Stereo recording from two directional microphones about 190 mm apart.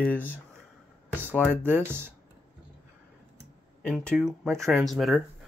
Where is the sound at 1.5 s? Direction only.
10° right (ahead or behind).